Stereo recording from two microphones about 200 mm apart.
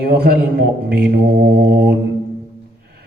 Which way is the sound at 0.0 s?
50° right (ahead or behind).